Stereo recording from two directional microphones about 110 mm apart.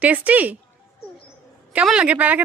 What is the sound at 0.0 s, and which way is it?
Speech, 15° right (ahead or behind).